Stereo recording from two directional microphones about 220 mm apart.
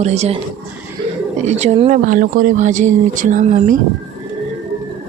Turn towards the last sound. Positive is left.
turn(degrees=-35)  # may be behind; listen again after turning